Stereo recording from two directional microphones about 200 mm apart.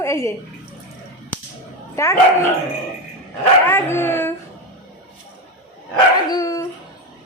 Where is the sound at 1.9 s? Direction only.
15° left (ahead or behind).